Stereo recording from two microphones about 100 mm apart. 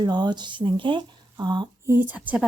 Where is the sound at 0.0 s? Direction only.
45° right (ahead or behind).